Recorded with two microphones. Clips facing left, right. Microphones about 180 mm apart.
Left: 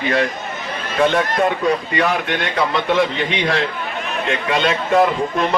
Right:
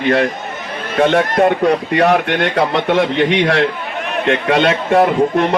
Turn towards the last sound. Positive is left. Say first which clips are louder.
# right 4 dB
turn(degrees=-60)  # may be behind; listen again after turning